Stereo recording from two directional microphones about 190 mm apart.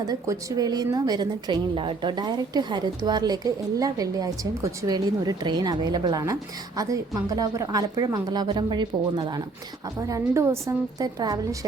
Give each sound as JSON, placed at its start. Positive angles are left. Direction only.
{"t": 0.0, "sound": "a woman's voice", "side_deg": -20}